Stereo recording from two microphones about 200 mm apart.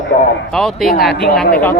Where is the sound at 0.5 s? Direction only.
Centre (ahead or behind).